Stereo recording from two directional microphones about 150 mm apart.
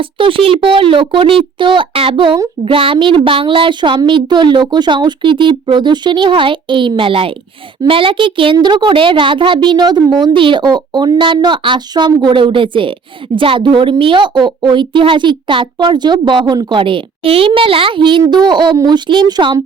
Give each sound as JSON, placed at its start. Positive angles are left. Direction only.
{"t": 0.0, "sound": "a child's voice", "side_deg": -35}